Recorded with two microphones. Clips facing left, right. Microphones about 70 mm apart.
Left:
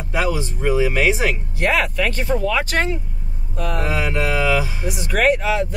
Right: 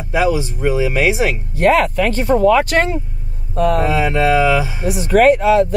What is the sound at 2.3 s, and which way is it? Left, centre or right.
Speech, right.